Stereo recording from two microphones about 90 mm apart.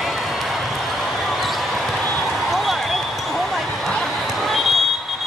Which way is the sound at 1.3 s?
Centre (ahead or behind).